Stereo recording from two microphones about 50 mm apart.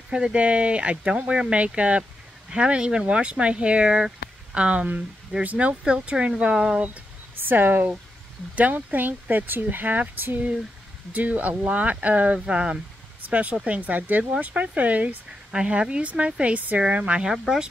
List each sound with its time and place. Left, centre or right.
0.1 s speech: right
7.4 s speech: right
15.5 s speech: centre
17.2 s speech: centre